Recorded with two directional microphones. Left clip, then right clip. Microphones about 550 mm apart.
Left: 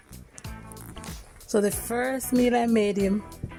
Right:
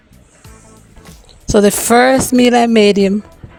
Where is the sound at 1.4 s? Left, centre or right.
Centre.